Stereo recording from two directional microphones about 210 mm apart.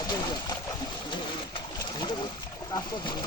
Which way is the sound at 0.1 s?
20° left (ahead or behind).